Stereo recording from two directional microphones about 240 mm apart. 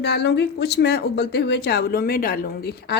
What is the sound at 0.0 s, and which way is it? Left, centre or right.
Speech, left.